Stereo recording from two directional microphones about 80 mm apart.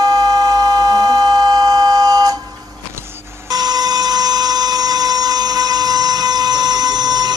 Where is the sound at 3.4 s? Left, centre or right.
Right.